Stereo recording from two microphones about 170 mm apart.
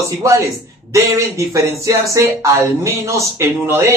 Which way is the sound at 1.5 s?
20° right (ahead or behind).